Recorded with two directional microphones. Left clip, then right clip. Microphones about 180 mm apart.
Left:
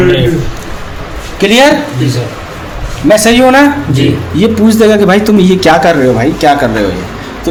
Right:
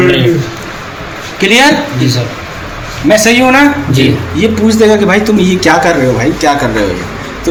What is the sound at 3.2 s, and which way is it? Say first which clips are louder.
Speech: left 2 dB; 45° left (ahead or behind).